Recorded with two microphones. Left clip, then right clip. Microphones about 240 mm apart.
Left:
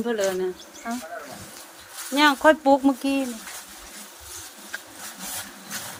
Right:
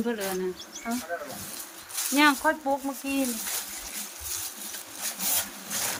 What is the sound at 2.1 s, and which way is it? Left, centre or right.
Speech, left.